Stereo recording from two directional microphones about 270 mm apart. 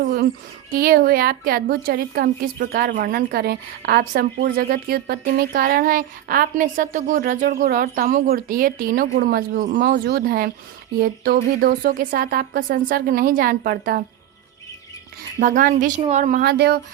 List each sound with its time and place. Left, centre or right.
0.0 s a woman's voice: right
15.4 s speech: right